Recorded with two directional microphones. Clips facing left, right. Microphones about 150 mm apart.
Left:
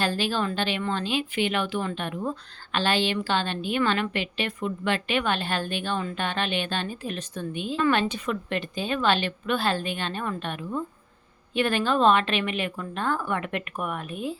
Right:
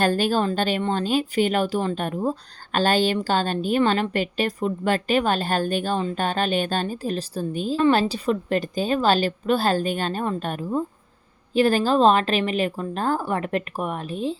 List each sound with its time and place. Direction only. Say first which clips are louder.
0.0 s a woman's voice: right 5 dB; 45° right (ahead or behind); by 14.3 s 30° right (ahead or behind)